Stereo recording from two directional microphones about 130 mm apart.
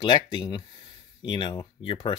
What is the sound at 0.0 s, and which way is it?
Speech, 35° left (ahead or behind).